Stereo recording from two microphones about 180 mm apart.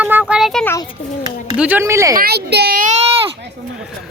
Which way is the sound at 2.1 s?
60° right (ahead or behind).